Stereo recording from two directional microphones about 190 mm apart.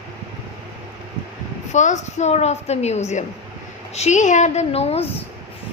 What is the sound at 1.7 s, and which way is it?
A woman's voice, 40° left (ahead or behind).